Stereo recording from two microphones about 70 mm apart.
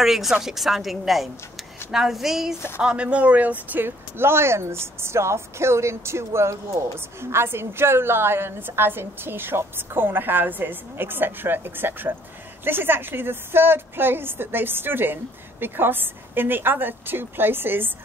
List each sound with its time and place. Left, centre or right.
0.0 s a woman's voice: centre
2.8 s speech: centre